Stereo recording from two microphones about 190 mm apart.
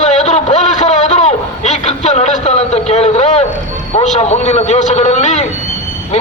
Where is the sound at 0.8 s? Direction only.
35° left (ahead or behind).